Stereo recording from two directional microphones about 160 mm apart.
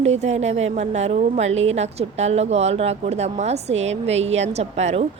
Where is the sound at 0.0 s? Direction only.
45° right (ahead or behind).